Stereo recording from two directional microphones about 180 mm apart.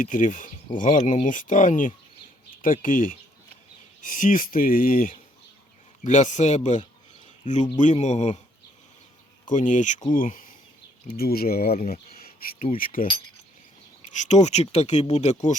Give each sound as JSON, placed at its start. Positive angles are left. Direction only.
{"t": 0.0, "sound": "speech", "side_deg": 45}
{"t": 9.5, "sound": "speech", "side_deg": 45}
{"t": 11.7, "sound": "speech", "side_deg": 40}
{"t": 14.1, "sound": "speech", "side_deg": 40}